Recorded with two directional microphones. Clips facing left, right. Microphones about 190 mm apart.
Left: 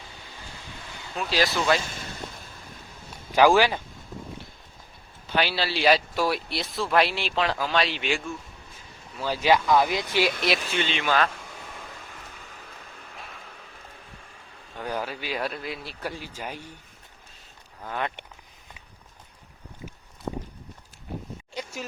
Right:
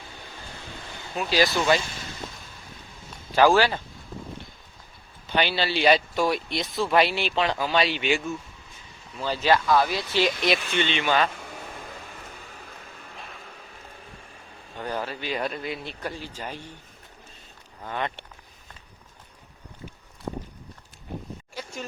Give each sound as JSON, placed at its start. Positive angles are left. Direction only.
{"t": 1.1, "sound": "speech", "side_deg": 0}
{"t": 3.3, "sound": "speech", "side_deg": 15}
{"t": 5.3, "sound": "speech", "side_deg": 0}
{"t": 9.1, "sound": "speech", "side_deg": 10}
{"t": 14.8, "sound": "speech", "side_deg": 10}
{"t": 17.8, "sound": "speech", "side_deg": 0}
{"t": 21.5, "sound": "a sound", "side_deg": 15}